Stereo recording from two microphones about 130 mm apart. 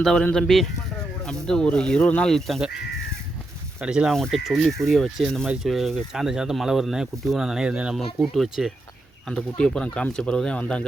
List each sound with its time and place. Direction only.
0.0 s speech: 5° left (ahead or behind)
3.8 s speech: 5° right (ahead or behind)